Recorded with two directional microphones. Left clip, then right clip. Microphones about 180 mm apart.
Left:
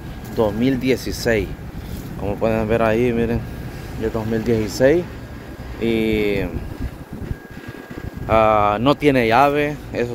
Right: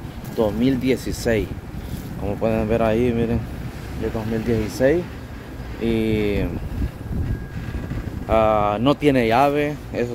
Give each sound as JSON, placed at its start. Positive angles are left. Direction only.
{"t": 0.4, "sound": "speech", "side_deg": -15}
{"t": 4.1, "sound": "speech", "side_deg": 5}
{"t": 8.3, "sound": "speech", "side_deg": -10}